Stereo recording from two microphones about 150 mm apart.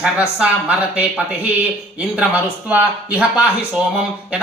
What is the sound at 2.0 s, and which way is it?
Speech, 10° right (ahead or behind).